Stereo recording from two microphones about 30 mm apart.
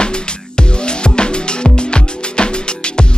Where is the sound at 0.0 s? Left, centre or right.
Left.